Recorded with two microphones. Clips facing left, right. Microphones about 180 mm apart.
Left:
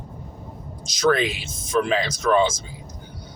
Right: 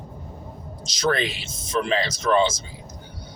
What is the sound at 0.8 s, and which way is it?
Speech, 50° left (ahead or behind).